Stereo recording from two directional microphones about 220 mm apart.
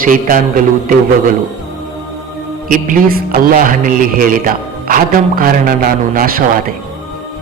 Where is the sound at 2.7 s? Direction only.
40° right (ahead or behind).